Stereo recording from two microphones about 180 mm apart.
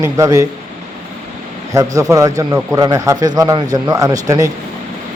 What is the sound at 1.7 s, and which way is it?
A man's voice, 20° right (ahead or behind).